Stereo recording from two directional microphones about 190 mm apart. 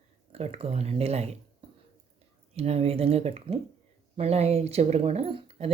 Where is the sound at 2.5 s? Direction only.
35° right (ahead or behind).